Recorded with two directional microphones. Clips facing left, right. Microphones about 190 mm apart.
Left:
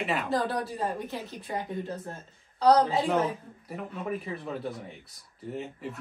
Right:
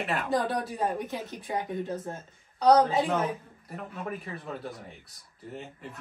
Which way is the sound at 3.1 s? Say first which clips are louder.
Left 2 dB; centre (ahead or behind).